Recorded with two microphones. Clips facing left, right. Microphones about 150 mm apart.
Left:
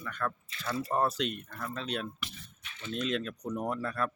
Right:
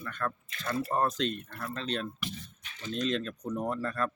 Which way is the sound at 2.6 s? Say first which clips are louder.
Even; 35° right (ahead or behind).